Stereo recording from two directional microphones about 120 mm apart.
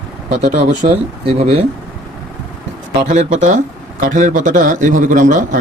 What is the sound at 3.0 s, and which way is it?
Speech, 80° right.